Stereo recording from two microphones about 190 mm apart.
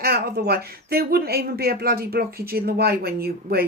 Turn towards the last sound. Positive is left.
turn(degrees=-55)  # may be behind; listen again after turning